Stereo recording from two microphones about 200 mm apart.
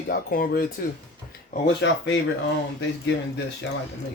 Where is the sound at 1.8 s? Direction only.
65° left (ahead or behind).